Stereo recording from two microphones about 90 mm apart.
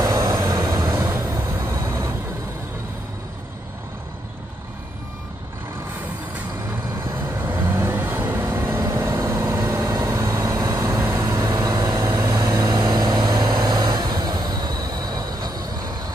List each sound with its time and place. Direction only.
0.0 s vehicle: 35° right (ahead or behind)
7.2 s vehicle: 25° right (ahead or behind); by 15.6 s 45° right (ahead or behind)